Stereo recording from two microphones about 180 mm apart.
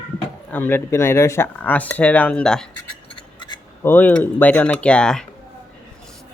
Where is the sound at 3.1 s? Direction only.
25° left (ahead or behind).